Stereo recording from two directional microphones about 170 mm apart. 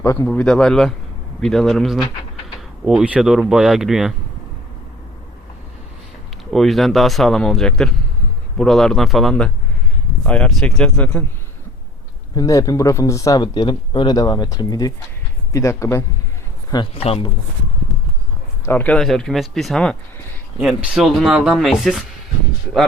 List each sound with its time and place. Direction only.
0.0 s speech: 15° left (ahead or behind)
0.3 s speech: 5° left (ahead or behind)
6.5 s speech: centre (ahead or behind)
12.3 s speech: 20° left (ahead or behind)
16.7 s speech: 30° left (ahead or behind)
18.6 s speech: 10° left (ahead or behind)